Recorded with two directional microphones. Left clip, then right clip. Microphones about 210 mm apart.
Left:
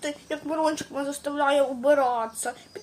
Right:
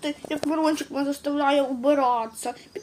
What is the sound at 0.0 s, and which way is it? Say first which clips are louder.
A woman's voice: right 3 dB; 10° left (ahead or behind).